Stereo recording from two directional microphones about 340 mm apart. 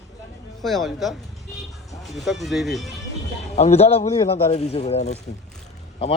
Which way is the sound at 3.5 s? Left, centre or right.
Centre.